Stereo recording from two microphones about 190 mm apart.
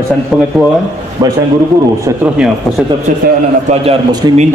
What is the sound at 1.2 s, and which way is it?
Speech, 25° right (ahead or behind).